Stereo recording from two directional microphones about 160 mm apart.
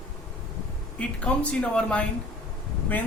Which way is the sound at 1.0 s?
5° left (ahead or behind).